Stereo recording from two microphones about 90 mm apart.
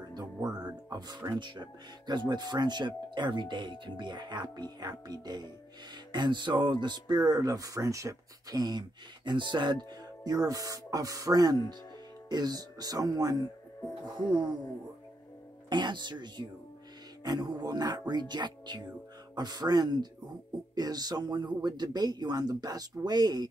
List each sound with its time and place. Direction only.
0.1 s music: 45° right (ahead or behind)
0.8 s speech: 55° right (ahead or behind)
14.0 s speech: 55° right (ahead or behind)
15.7 s speech: 55° right (ahead or behind)